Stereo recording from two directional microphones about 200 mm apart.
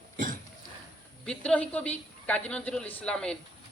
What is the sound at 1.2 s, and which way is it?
A woman's voice, 5° left (ahead or behind).